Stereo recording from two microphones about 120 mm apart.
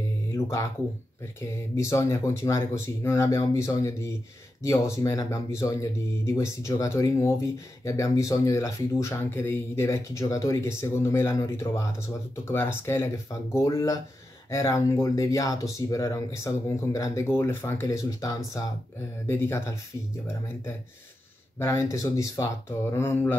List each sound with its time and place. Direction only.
0.3 s music: 25° left (ahead or behind)
1.4 s speech: 25° left (ahead or behind)
21.5 s speech: 20° left (ahead or behind)